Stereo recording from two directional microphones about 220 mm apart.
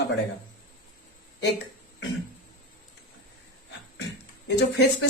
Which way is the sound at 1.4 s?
50° left (ahead or behind).